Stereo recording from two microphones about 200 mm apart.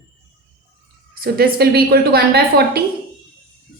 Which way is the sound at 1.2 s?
50° right (ahead or behind).